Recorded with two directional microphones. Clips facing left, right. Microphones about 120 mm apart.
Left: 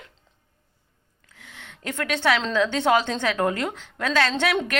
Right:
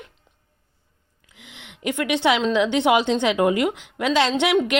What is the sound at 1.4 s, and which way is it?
A woman's voice, 15° right (ahead or behind).